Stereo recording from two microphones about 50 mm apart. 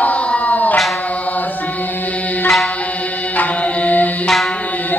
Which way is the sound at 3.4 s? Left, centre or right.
Left.